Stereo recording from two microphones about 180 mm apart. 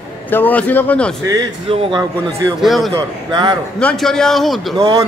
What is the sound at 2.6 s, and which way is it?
Speech, centre (ahead or behind).